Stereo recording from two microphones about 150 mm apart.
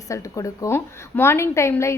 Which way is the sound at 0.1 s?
20° left (ahead or behind).